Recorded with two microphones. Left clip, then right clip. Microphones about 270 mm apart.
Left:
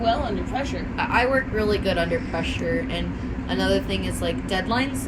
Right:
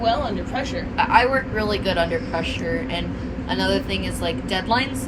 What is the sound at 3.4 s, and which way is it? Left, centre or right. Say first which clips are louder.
A woman's voice: right 1 dB; right.